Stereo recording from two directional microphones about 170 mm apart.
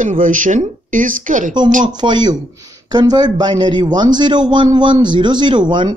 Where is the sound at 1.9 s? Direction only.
25° right (ahead or behind).